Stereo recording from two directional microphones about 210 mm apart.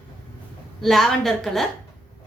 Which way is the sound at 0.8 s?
Centre (ahead or behind).